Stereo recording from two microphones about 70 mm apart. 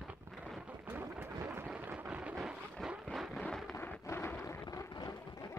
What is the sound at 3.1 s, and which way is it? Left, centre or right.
Vehicle, centre.